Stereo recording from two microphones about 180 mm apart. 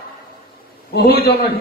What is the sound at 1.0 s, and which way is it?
Speech, 60° left (ahead or behind).